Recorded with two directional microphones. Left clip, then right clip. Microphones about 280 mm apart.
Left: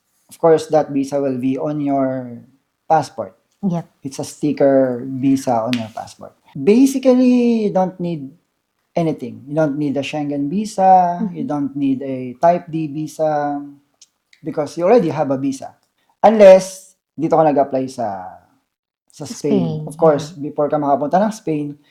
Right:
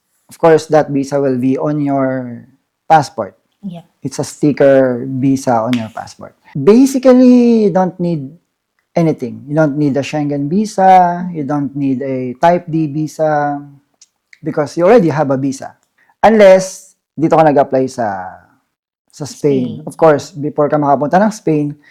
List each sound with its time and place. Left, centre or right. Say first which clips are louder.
0.3 s speech: right 4 dB; right